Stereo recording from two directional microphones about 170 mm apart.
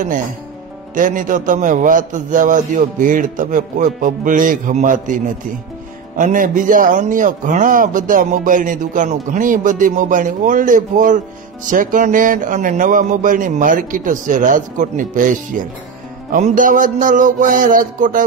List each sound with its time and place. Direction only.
0.9 s a man's voice: 50° right (ahead or behind)